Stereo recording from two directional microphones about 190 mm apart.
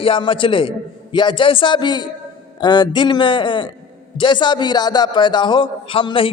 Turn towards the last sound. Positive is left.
turn(degrees=25)  # may be behind; listen again after turning